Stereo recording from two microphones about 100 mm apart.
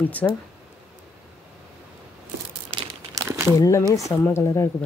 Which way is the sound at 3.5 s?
35° left (ahead or behind).